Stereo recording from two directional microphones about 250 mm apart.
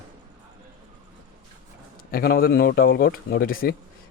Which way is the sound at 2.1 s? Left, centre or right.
Left.